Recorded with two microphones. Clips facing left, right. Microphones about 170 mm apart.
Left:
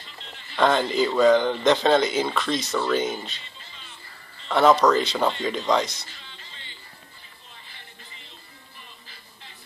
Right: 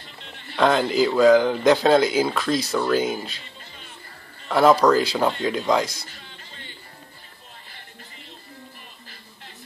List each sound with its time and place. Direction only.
0.0 s music: 55° right (ahead or behind)
0.6 s speech: 5° right (ahead or behind)
4.5 s speech: 5° right (ahead or behind)
6.0 s music: 50° right (ahead or behind)